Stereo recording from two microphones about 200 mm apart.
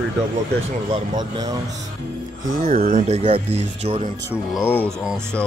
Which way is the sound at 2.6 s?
45° right (ahead or behind).